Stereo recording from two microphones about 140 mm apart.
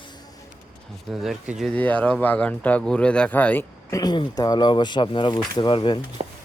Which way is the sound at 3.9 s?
30° left (ahead or behind).